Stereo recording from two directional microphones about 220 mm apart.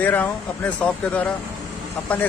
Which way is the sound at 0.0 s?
5° left (ahead or behind).